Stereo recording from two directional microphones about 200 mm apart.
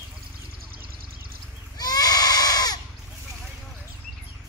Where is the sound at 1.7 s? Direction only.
20° left (ahead or behind).